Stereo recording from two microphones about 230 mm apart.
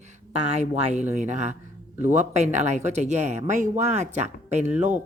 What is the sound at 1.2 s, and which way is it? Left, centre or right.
Speech, right.